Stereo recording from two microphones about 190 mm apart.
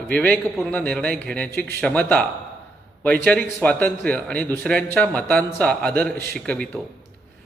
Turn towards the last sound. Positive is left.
turn(degrees=5)  # may be behind; listen again after turning